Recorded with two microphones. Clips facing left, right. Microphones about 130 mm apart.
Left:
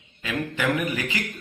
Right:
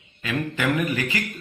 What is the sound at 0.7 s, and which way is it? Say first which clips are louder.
Speech: right 2 dB; 15° left (ahead or behind).